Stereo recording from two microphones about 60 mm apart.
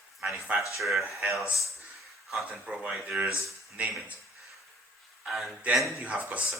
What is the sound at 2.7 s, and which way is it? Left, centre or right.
Speech, centre.